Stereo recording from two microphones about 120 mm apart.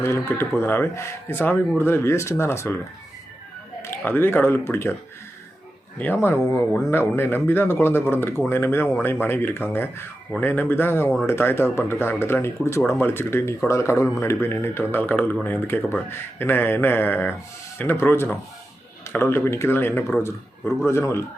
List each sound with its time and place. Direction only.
0.0 s speech: 20° left (ahead or behind)
3.8 s speech: 15° left (ahead or behind)
6.0 s speech: 15° left (ahead or behind)